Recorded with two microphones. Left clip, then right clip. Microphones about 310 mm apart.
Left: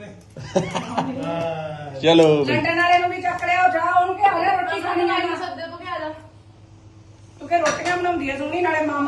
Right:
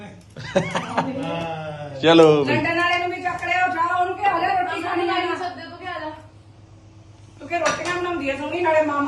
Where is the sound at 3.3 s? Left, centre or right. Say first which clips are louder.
Left 4 dB; centre.